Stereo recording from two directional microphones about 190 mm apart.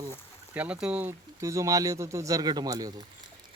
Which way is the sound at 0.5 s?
5° right (ahead or behind).